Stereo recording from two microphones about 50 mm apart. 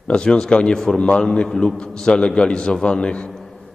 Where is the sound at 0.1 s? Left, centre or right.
Centre.